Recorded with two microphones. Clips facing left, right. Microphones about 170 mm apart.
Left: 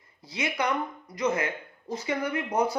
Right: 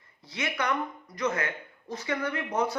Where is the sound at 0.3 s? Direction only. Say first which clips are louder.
Left 2 dB; 20° left (ahead or behind).